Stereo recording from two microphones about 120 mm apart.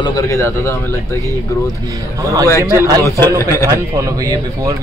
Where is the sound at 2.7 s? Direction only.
30° right (ahead or behind).